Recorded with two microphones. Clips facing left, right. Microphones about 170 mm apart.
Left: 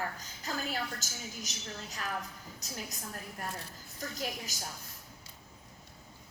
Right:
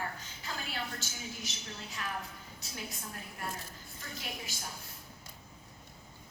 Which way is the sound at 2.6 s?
40° left (ahead or behind).